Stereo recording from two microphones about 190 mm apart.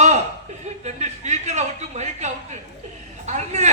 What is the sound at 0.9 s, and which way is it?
Speech, 35° right (ahead or behind).